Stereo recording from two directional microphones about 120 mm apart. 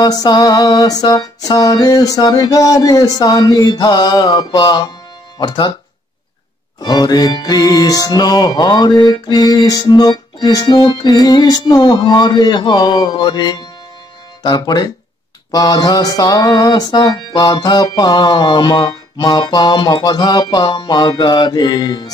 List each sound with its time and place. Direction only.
0.0 s music: 35° left (ahead or behind)
6.8 s music: 35° left (ahead or behind)